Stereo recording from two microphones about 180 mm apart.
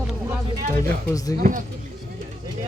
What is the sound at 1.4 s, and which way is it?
Speech, 50° right (ahead or behind).